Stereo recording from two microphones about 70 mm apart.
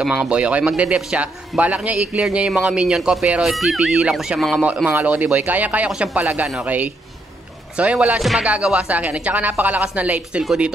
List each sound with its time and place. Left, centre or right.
0.0 s speech: centre
1.5 s speech: centre
1.9 s speech: centre
5.0 s a woman's voice: right
8.2 s speech: centre
8.5 s a woman's voice: centre